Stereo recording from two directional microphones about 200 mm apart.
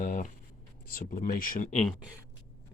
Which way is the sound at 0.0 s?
40° left (ahead or behind).